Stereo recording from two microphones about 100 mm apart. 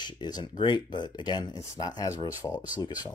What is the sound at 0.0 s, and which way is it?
Speech, 50° left (ahead or behind).